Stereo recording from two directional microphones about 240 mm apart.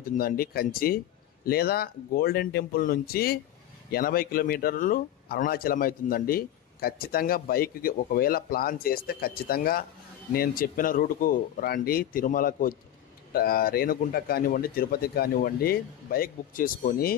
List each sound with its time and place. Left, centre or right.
0.1 s speech: left